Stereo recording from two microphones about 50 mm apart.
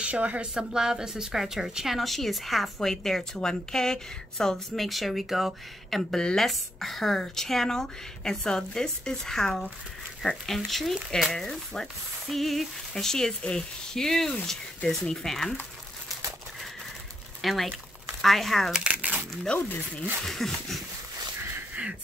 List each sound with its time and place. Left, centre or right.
0.0 s speech: right
0.6 s speech: centre
17.4 s speech: centre
18.9 s crumpling: right
19.5 s speech: left
20.2 s speech: centre